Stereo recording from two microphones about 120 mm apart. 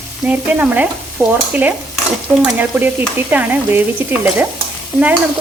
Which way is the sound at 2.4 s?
15° right (ahead or behind).